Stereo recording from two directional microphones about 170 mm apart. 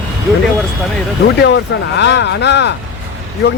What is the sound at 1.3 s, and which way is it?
Speech, 90° left.